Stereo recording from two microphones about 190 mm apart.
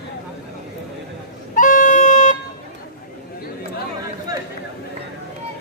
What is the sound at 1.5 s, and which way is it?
Music, 45° left (ahead or behind).